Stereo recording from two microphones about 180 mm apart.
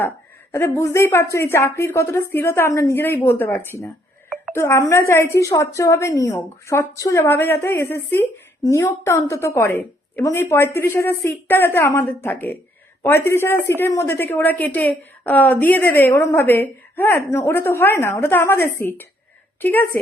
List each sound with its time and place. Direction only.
0.5 s a woman's voice: 15° left (ahead or behind)